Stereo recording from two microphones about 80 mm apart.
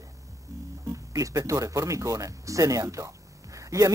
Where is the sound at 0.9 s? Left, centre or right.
Right.